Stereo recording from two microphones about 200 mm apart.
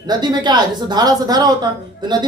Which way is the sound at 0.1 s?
20° right (ahead or behind).